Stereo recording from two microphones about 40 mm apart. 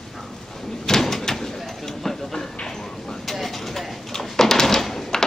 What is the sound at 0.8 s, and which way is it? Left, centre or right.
Door, centre.